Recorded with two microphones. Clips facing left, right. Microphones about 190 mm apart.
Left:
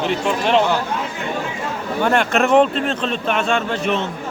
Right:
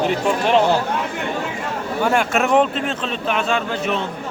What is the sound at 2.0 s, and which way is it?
Speech, 5° right (ahead or behind).